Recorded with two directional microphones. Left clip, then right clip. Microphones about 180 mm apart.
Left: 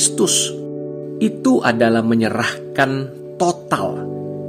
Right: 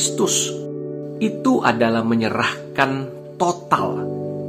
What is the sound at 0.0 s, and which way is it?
A man's voice, 45° left (ahead or behind).